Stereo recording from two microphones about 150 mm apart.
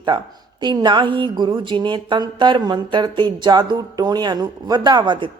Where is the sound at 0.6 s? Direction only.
30° right (ahead or behind).